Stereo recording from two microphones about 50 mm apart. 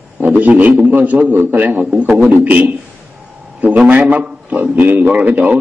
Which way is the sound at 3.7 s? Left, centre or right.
Right.